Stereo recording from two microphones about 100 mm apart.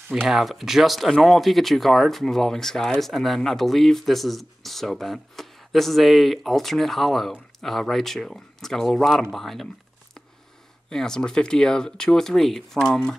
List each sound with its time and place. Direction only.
0.1 s speech: 5° right (ahead or behind)
10.9 s speech: 5° left (ahead or behind)